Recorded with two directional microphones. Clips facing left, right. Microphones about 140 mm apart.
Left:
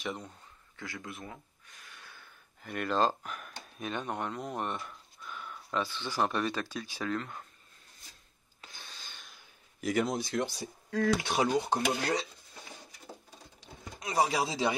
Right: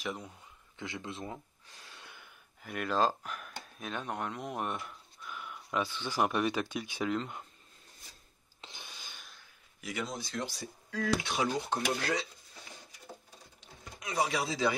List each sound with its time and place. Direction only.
0.0 s speech: centre (ahead or behind)
0.7 s gasp: 20° right (ahead or behind); by 3.5 s centre (ahead or behind)
3.7 s speech: centre (ahead or behind); by 7.4 s 20° right (ahead or behind)
8.5 s a sound: 20° right (ahead or behind)
9.8 s speech: 45° left (ahead or behind)
11.5 s stir: 25° left (ahead or behind)
14.2 s stir: 25° left (ahead or behind)